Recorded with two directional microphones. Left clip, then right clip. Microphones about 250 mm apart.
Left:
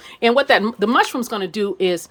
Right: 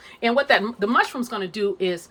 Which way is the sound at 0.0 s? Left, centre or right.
Left.